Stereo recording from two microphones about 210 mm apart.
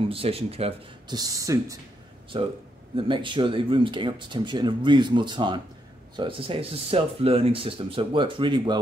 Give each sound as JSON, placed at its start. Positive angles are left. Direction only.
{"t": 0.0, "sound": "speech", "side_deg": -25}
{"t": 2.3, "sound": "speech", "side_deg": -25}